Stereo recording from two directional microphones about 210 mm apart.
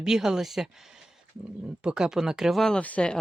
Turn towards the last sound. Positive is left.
turn(degrees=5)  # may be behind; listen again after turning